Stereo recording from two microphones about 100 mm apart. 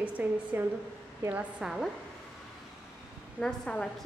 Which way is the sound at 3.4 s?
5° left (ahead or behind).